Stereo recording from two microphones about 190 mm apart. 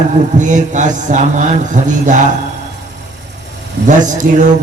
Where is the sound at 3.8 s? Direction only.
40° right (ahead or behind).